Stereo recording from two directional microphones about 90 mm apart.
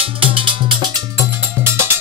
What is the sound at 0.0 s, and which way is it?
Music, 90° right.